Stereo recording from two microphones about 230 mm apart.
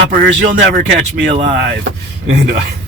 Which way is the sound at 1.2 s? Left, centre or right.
Right.